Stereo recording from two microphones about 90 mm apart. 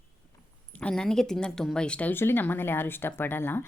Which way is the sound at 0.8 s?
10° left (ahead or behind).